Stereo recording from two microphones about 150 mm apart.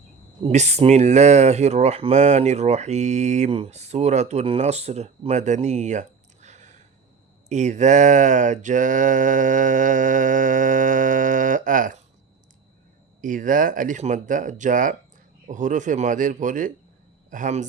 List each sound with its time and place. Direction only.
0.4 s speech: 50° right (ahead or behind)
7.5 s a sound: 50° right (ahead or behind)
13.2 s speech: 60° right (ahead or behind)